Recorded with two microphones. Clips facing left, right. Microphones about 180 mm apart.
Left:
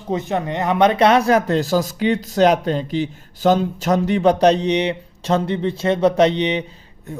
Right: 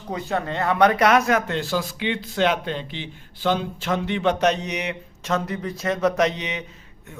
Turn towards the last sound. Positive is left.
turn(degrees=30)  # may be behind; listen again after turning